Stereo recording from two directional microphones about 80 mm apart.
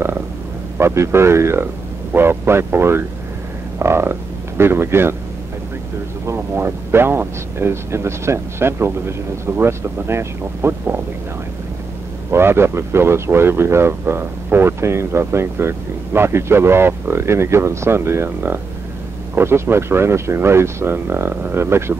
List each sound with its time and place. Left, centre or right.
0.7 s speech: right
6.3 s speech: right
12.3 s speech: right